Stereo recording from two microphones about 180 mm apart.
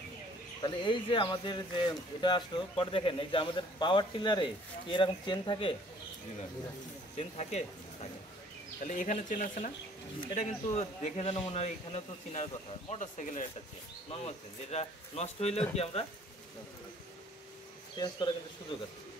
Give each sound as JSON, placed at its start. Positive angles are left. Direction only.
{"t": 0.6, "sound": "speech", "side_deg": 25}
{"t": 7.2, "sound": "speech", "side_deg": 35}
{"t": 8.8, "sound": "a man's voice", "side_deg": 45}
{"t": 17.9, "sound": "speech", "side_deg": 25}